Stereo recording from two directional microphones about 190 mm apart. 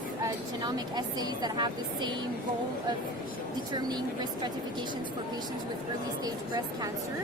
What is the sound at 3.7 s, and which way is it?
Speech, 20° right (ahead or behind).